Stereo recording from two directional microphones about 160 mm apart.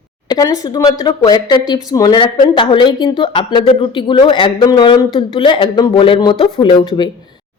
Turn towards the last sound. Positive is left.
turn(degrees=35)  # may be behind; listen again after turning